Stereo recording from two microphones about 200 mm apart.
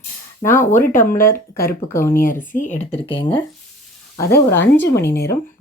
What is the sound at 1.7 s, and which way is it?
Speech, 10° left (ahead or behind).